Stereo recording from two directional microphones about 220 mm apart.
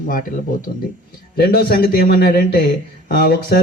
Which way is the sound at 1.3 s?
45° left (ahead or behind).